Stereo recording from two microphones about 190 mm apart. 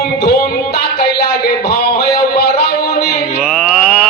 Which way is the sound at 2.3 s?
60° left (ahead or behind).